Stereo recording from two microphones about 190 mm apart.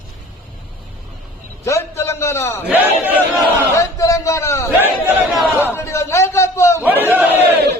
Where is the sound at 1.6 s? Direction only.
15° left (ahead or behind).